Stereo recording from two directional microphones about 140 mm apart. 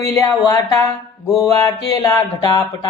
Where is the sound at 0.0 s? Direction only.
25° left (ahead or behind).